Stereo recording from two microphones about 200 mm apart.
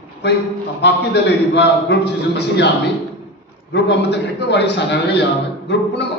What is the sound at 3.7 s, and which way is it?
A man's voice, 60° left (ahead or behind).